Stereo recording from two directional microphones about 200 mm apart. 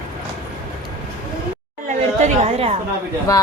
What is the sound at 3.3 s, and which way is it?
Speech, 15° left (ahead or behind).